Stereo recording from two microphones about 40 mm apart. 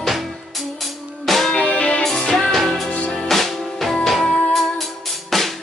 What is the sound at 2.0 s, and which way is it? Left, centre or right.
Music, centre.